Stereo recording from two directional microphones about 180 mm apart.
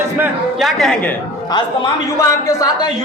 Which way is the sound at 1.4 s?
20° left (ahead or behind).